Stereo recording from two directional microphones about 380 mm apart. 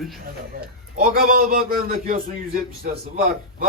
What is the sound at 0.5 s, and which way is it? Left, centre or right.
A man's voice, right.